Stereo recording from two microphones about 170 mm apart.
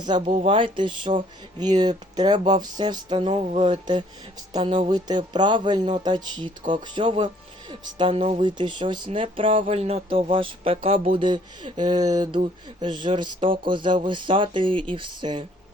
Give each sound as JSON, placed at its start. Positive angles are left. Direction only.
{"t": 0.0, "sound": "speech", "side_deg": -25}